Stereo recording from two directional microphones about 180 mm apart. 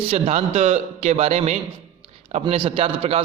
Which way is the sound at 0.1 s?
35° right (ahead or behind).